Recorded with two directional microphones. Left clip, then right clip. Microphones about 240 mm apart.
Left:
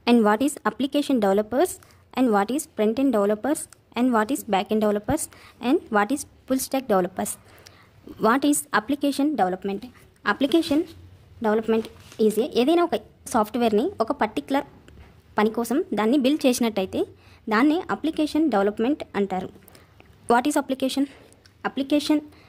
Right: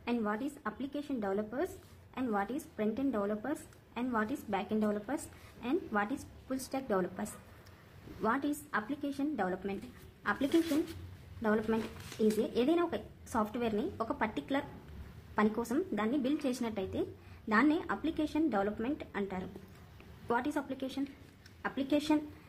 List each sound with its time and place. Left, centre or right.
0.0 s a woman's voice: left